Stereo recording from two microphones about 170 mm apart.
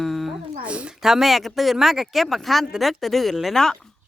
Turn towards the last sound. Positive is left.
turn(degrees=5)  # may be behind; listen again after turning